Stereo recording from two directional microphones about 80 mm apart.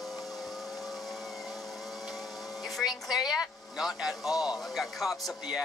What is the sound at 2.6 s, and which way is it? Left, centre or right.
Speech, centre.